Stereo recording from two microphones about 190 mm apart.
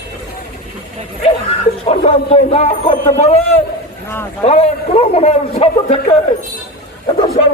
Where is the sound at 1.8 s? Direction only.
30° left (ahead or behind).